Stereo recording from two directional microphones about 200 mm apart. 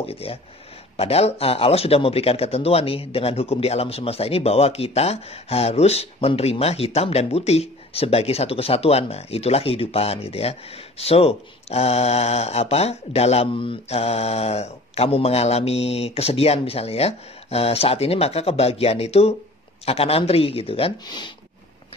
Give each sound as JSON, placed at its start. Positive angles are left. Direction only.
{"t": 0.0, "sound": "speech", "side_deg": 30}